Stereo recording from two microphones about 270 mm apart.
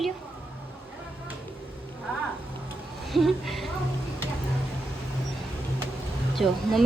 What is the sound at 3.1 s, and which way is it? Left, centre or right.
Speech, centre.